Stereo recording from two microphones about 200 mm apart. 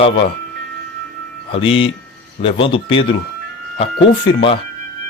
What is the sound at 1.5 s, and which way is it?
Speech, 25° left (ahead or behind).